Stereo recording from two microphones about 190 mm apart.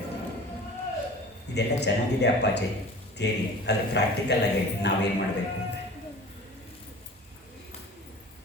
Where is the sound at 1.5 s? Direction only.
65° left (ahead or behind).